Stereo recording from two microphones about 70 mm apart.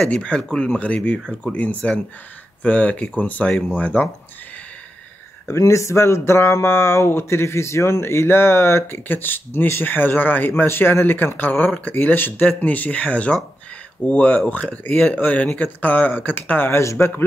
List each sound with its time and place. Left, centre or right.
0.0 s speech: centre
5.5 s speech: left
16.8 s a man's voice: left